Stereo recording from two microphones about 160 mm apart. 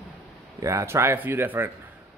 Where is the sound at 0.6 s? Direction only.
20° right (ahead or behind).